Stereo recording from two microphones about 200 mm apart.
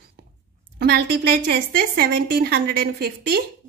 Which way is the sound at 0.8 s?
55° right (ahead or behind).